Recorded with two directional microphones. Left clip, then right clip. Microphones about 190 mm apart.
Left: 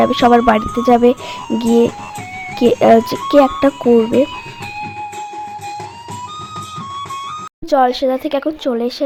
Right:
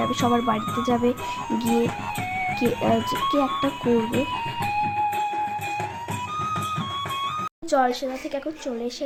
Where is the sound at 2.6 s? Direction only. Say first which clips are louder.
Left 15 dB; 45° left (ahead or behind).